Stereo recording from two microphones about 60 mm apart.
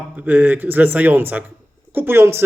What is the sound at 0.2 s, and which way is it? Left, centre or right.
Speech, right.